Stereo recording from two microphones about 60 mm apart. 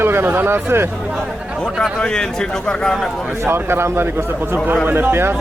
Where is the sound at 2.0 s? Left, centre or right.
Centre.